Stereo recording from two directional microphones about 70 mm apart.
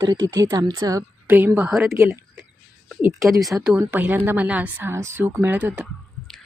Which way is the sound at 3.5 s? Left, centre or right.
Centre.